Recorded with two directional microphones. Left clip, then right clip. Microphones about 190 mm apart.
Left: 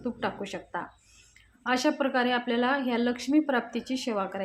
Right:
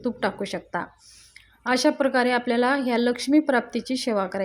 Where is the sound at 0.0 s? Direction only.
30° right (ahead or behind).